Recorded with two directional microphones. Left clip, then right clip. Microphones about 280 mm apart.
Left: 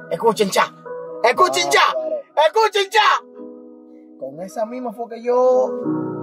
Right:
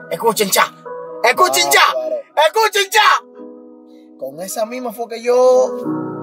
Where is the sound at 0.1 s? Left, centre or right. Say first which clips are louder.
Right 1 dB; centre.